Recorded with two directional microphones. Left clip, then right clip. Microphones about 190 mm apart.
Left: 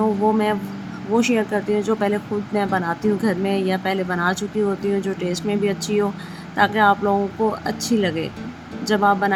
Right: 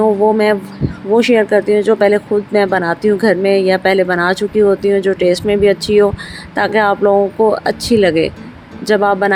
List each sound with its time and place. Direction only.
0.0 s speech: 25° right (ahead or behind)